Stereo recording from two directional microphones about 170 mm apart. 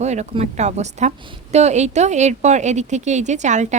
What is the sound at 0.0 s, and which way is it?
A woman's voice, 40° right (ahead or behind).